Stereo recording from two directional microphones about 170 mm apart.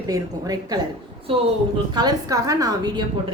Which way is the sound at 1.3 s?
35° right (ahead or behind).